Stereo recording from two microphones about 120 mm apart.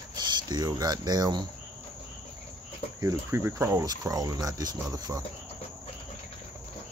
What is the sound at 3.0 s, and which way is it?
Speech, 25° right (ahead or behind).